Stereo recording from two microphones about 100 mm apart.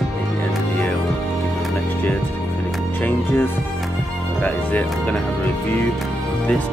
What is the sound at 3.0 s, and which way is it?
Speech, 20° left (ahead or behind).